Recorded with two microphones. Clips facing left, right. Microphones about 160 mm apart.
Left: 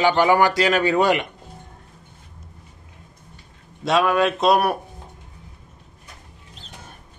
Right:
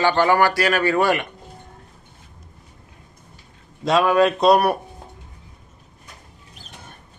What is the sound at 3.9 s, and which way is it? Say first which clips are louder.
Speech: right 2 dB; centre (ahead or behind).